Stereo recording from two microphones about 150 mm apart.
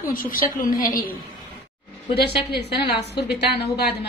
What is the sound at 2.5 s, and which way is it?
A woman's voice, 90° left.